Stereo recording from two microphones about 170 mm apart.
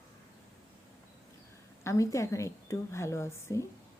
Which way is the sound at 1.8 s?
15° left (ahead or behind).